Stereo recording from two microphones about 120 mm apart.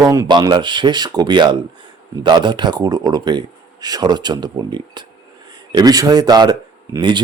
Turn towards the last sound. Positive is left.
turn(degrees=-40)  # may be behind; listen again after turning